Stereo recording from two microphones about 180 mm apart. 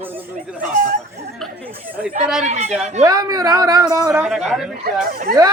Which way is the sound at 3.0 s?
20° right (ahead or behind).